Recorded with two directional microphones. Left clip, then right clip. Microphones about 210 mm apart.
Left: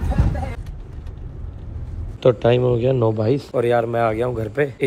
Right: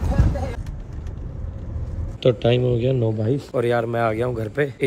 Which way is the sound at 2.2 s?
Centre (ahead or behind).